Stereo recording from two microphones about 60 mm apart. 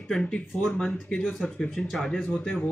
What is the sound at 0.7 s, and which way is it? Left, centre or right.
Speech, centre.